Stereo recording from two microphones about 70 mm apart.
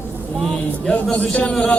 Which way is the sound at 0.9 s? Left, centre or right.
Left.